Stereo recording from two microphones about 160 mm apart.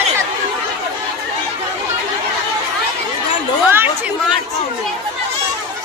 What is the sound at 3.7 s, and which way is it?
Chatter, 10° right (ahead or behind).